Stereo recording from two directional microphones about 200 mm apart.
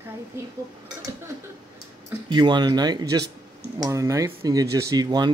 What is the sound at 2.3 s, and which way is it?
Speech, 20° right (ahead or behind).